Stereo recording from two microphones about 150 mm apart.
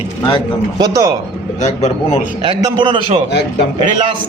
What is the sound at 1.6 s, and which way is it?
Speech, 50° left (ahead or behind).